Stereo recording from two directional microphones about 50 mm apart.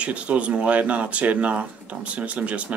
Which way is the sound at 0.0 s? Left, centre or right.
Right.